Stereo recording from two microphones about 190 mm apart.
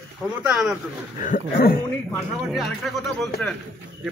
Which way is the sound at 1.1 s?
40° left (ahead or behind).